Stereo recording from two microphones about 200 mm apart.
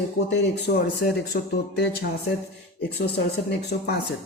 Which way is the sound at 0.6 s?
55° left (ahead or behind).